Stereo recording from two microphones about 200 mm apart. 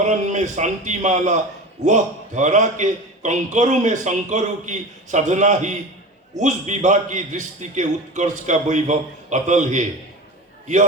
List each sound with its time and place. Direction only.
0.0 s a man's voice: 35° right (ahead or behind)